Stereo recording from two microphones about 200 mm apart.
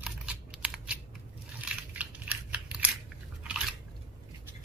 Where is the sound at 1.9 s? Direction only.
5° right (ahead or behind).